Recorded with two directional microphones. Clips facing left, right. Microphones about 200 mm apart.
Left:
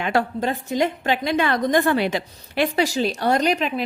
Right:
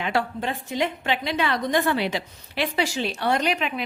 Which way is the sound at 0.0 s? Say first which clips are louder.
Left 4 dB; 45° left (ahead or behind).